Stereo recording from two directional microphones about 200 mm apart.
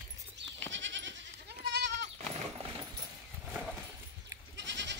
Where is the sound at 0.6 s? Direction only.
65° right (ahead or behind).